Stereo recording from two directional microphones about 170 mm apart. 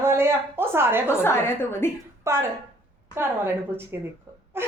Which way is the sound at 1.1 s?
15° left (ahead or behind).